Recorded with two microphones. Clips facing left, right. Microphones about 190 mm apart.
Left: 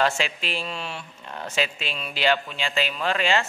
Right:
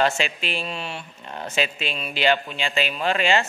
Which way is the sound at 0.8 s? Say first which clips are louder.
Right 1 dB; 25° right (ahead or behind).